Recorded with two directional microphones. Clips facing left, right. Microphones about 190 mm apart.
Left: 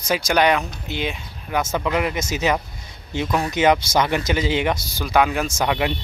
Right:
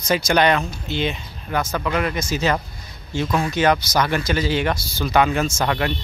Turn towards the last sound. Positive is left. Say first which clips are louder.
# even
turn(degrees=15)  # may be behind; listen again after turning